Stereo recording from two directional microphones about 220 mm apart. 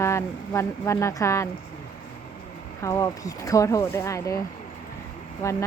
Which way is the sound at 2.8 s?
15° left (ahead or behind).